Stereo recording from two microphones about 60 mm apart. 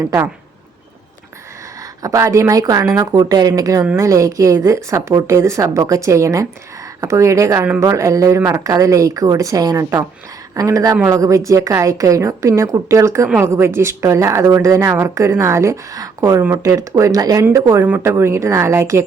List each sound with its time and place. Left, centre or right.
2.0 s speech: right
2.2 s speech: right
3.9 s speech: right
8.6 s speech: right
10.5 s a woman's voice: right
17.5 s a woman's voice: right